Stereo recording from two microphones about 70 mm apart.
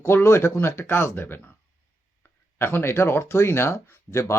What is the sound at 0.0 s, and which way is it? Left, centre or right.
Speech, left.